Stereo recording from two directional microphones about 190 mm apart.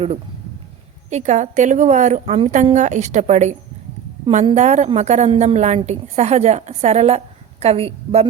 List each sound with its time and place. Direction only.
1.1 s a woman's voice: 40° right (ahead or behind)